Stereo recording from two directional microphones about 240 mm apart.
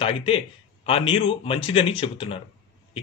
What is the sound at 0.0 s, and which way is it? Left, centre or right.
A man's voice, left.